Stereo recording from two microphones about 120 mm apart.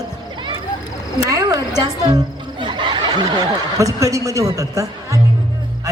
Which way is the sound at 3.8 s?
25° right (ahead or behind).